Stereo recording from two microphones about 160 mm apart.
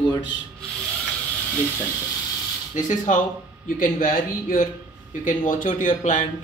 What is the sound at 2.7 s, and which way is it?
Speech, 50° left (ahead or behind).